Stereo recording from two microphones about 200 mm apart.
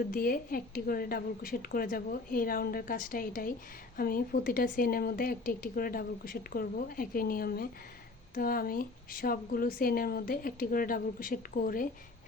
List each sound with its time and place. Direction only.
0.1 s speech: 45° left (ahead or behind)